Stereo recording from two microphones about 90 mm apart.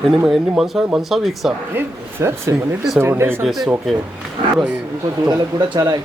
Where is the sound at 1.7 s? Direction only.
30° right (ahead or behind).